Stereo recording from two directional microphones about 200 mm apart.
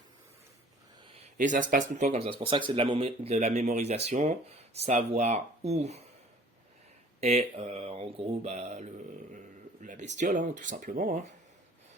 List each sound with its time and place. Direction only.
1.1 s speech: 40° right (ahead or behind)
7.2 s speech: 30° right (ahead or behind)